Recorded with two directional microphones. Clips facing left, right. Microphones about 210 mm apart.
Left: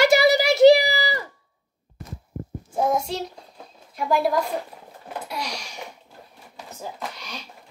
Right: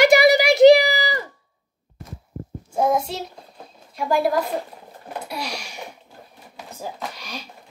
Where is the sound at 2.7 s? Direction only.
5° right (ahead or behind).